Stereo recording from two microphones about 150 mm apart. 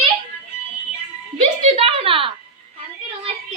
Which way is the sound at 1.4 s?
40° right (ahead or behind).